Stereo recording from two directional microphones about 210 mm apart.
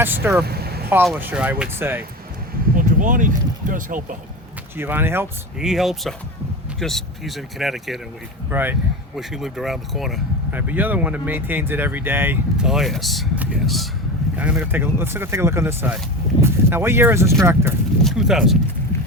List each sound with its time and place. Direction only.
0.0 s speech: 10° right (ahead or behind)
0.4 s vehicle: 50° right (ahead or behind)
1.0 s speech: 5° right (ahead or behind)
2.7 s speech: 40° right (ahead or behind)
4.8 s speech: 10° right (ahead or behind)